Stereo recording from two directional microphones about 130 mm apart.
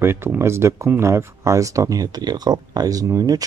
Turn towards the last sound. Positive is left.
turn(degrees=-30)  # may be behind; listen again after turning